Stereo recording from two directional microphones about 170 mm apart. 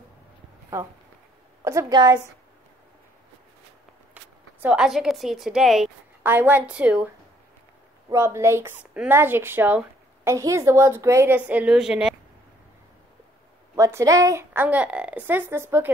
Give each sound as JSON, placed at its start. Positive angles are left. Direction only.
{"t": 1.6, "sound": "a woman's voice", "side_deg": -15}
{"t": 4.1, "sound": "a woman's voice", "side_deg": -10}
{"t": 8.1, "sound": "speech", "side_deg": -15}
{"t": 13.7, "sound": "speech", "side_deg": -20}